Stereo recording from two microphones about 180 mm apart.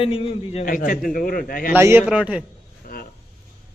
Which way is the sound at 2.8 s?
50° left (ahead or behind).